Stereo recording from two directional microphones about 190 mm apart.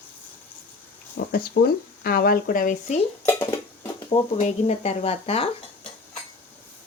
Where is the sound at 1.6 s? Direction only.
50° left (ahead or behind).